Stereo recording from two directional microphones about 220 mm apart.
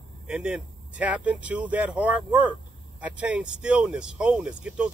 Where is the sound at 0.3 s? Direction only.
5° right (ahead or behind).